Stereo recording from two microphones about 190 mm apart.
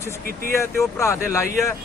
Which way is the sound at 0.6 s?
15° left (ahead or behind).